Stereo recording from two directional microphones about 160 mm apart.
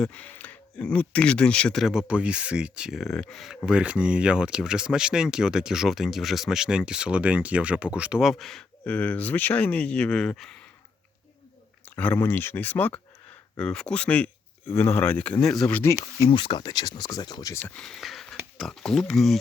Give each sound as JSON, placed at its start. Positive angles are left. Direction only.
{"t": 0.0, "sound": "speech", "side_deg": 10}
{"t": 11.9, "sound": "speech", "side_deg": 10}
{"t": 16.3, "sound": "speech", "side_deg": 30}
{"t": 17.7, "sound": "speech", "side_deg": 0}